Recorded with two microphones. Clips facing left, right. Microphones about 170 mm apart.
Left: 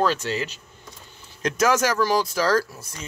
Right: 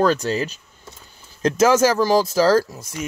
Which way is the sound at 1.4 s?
30° right (ahead or behind).